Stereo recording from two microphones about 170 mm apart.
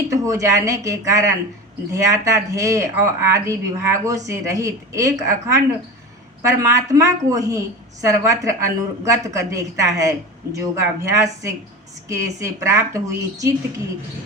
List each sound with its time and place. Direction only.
0.1 s a woman's voice: 20° right (ahead or behind)